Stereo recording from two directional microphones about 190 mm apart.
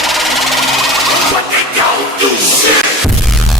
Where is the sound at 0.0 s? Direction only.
Centre (ahead or behind).